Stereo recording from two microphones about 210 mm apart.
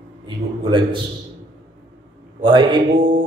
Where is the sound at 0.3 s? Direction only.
25° right (ahead or behind).